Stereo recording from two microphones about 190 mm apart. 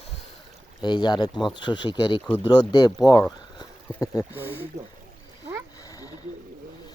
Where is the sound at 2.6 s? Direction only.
20° left (ahead or behind).